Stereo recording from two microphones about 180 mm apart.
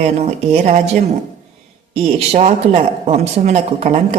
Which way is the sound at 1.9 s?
35° right (ahead or behind).